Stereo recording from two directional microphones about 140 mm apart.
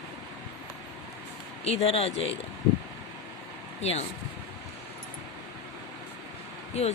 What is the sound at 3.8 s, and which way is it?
Speech, 50° left (ahead or behind).